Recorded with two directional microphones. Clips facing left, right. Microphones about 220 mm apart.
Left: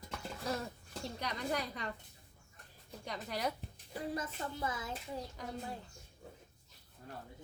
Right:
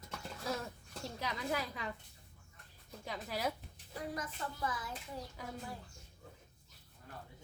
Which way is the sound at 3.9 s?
30° left (ahead or behind).